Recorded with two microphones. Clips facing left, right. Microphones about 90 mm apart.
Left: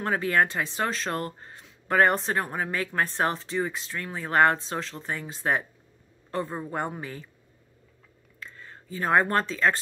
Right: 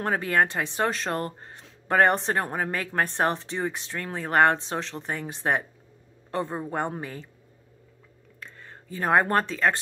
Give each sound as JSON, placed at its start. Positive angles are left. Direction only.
{"t": 0.1, "sound": "speech", "side_deg": -30}
{"t": 8.9, "sound": "speech", "side_deg": -25}